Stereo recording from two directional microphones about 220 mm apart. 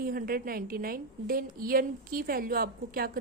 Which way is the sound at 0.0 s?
40° right (ahead or behind).